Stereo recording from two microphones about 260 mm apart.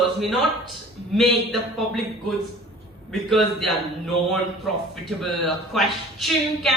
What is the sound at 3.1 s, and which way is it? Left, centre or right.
A man's voice, centre.